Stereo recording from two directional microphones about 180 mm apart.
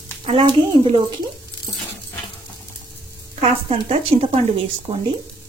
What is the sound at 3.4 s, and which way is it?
Speech, 35° right (ahead or behind).